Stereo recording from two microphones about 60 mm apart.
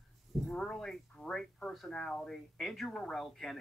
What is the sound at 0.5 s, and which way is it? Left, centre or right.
A woman's voice, centre.